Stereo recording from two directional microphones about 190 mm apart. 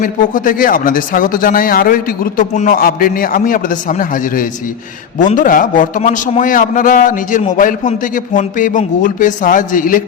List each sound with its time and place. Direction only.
0.0 s a man's voice: 45° left (ahead or behind)